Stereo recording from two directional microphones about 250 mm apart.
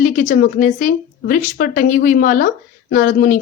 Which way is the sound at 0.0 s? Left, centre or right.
Left.